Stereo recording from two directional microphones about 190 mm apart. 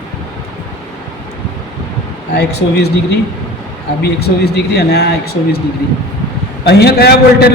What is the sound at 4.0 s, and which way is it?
A man's voice, 55° left (ahead or behind).